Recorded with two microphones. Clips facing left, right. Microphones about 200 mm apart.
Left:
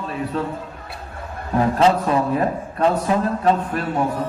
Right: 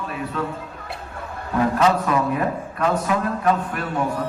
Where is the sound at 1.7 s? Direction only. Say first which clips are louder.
Left 3 dB; 30° left (ahead or behind).